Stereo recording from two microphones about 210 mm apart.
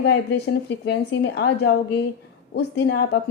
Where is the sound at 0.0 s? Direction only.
55° left (ahead or behind).